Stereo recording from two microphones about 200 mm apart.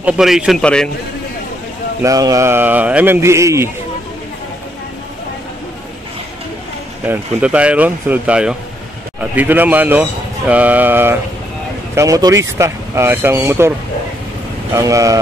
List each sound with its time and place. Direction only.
0.0 s a man's voice: 5° right (ahead or behind)
2.0 s speech: 15° right (ahead or behind)
7.1 s speech: 5° right (ahead or behind)